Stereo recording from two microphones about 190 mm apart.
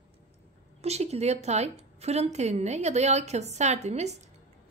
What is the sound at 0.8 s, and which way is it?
A woman's voice, 35° right (ahead or behind).